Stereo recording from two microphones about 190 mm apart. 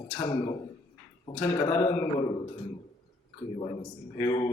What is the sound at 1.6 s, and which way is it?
Speech, 30° left (ahead or behind).